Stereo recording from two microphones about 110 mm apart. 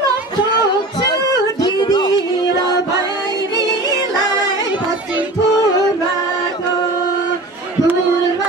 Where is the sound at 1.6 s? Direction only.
40° left (ahead or behind).